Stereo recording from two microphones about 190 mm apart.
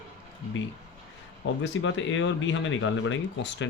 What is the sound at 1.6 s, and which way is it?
Speech, 80° left.